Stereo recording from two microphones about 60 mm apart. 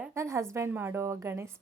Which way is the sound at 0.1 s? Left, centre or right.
Right.